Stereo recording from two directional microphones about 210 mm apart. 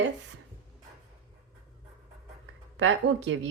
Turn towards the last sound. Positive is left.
turn(degrees=-60)  # may be behind; listen again after turning